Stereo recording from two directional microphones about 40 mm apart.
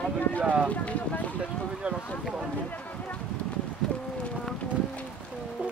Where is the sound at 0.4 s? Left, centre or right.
Right.